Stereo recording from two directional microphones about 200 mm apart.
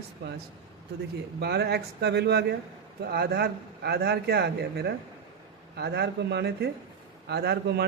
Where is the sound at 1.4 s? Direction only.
55° right (ahead or behind).